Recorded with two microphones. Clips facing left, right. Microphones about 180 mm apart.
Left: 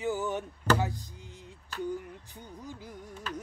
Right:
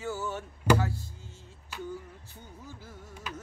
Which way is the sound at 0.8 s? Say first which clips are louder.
Even; 15° left (ahead or behind).